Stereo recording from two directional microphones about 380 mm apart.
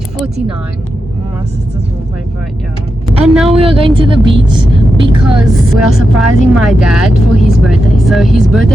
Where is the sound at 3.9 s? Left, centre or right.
Centre.